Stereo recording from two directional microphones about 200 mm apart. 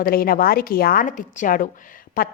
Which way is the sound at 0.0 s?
45° left (ahead or behind).